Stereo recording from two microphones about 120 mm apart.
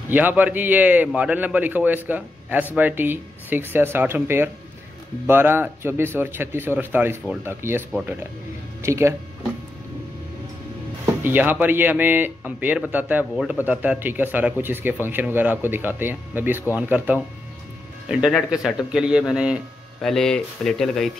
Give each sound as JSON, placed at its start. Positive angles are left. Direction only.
{"t": 0.1, "sound": "a man's voice", "side_deg": -15}
{"t": 8.8, "sound": "a man's voice", "side_deg": -25}
{"t": 11.1, "sound": "music", "side_deg": -15}
{"t": 11.6, "sound": "a man's voice", "side_deg": -15}
{"t": 18.2, "sound": "a man's voice", "side_deg": -5}
{"t": 20.0, "sound": "speech", "side_deg": 5}